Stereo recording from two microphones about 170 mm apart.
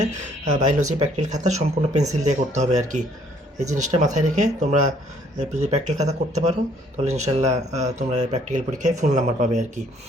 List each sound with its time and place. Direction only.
0.6 s speech: 45° right (ahead or behind)